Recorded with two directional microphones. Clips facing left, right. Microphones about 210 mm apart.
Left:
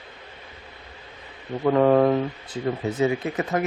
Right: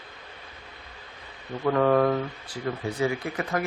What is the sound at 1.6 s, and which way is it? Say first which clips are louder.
Speech: left 4 dB; 25° left (ahead or behind).